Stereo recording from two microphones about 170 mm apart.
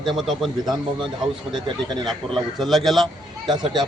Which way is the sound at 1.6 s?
25° right (ahead or behind).